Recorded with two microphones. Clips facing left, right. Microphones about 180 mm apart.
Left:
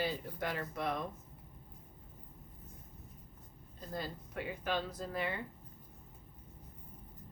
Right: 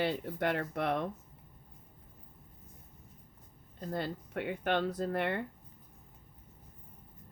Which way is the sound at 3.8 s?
65° right (ahead or behind).